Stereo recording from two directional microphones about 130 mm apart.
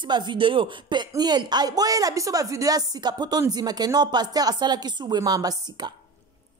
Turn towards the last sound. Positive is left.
turn(degrees=-30)  # may be behind; listen again after turning